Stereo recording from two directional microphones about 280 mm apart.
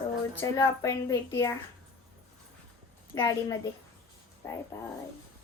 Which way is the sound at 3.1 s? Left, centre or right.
Centre.